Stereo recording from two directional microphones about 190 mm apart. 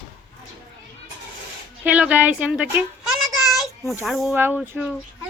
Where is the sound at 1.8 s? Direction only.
5° right (ahead or behind).